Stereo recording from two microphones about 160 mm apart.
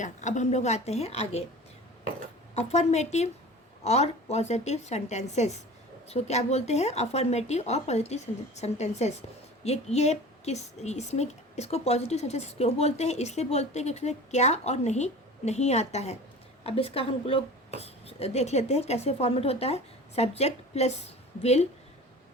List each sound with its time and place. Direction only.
0.0 s a woman's voice: 50° left (ahead or behind)
2.6 s a woman's voice: 45° left (ahead or behind)